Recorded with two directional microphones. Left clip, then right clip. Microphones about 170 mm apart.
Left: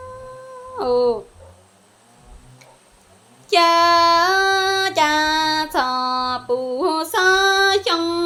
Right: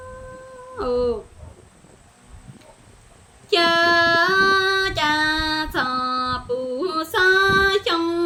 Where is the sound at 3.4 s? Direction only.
15° right (ahead or behind).